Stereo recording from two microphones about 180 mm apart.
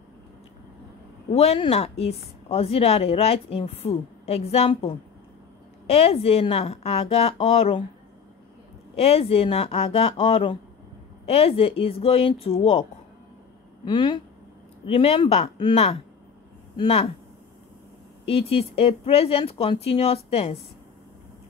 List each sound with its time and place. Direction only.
1.3 s a woman's voice: 35° left (ahead or behind)
8.9 s a woman's voice: 35° left (ahead or behind)
13.8 s a woman's voice: 25° left (ahead or behind)
18.2 s a woman's voice: 35° left (ahead or behind)